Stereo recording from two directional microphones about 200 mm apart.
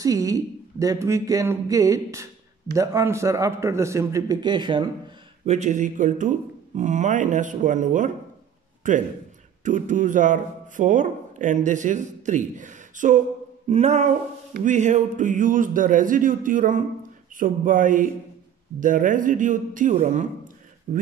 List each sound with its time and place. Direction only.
0.0 s speech: 15° right (ahead or behind)
5.4 s speech: 35° right (ahead or behind)